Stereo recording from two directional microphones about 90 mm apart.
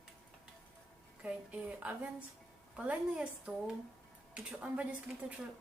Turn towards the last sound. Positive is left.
turn(degrees=-15)  # may be behind; listen again after turning